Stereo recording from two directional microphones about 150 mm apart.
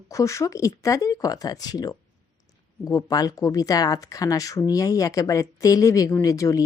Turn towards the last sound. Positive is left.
turn(degrees=20)  # may be behind; listen again after turning